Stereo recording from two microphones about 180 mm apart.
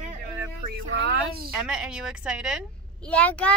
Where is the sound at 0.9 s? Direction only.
70° right (ahead or behind).